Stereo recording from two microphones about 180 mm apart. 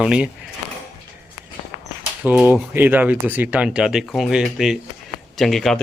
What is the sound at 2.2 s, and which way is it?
Speech, 10° right (ahead or behind).